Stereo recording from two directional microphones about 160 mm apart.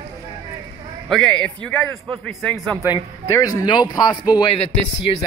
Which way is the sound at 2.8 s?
20° left (ahead or behind).